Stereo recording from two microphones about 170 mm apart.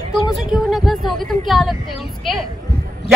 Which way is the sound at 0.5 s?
Centre (ahead or behind).